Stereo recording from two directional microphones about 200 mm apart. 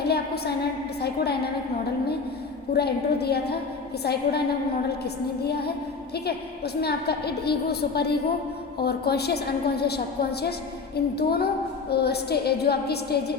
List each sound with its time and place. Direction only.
0.0 s a woman's voice: 55° left (ahead or behind)
2.7 s a woman's voice: 55° left (ahead or behind)
6.8 s a woman's voice: 55° left (ahead or behind)